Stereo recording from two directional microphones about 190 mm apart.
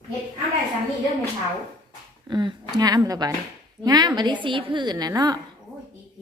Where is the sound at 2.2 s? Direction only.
25° right (ahead or behind).